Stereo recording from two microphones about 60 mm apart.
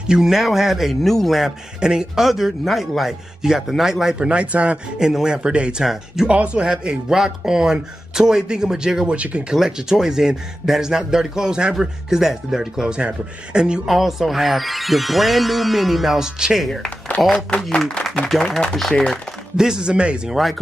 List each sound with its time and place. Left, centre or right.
0.0 s speech: centre
1.8 s speech: centre
4.9 s speech: centre
9.6 s speech: centre
13.8 s speech: centre
16.6 s speech: centre
17.6 s speech: centre
18.3 s speech: centre
19.5 s speech: centre